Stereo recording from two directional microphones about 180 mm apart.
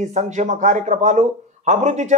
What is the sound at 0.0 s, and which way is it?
Speech, 40° right (ahead or behind).